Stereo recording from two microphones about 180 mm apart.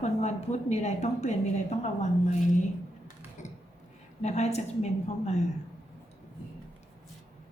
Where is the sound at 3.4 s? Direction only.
40° left (ahead or behind).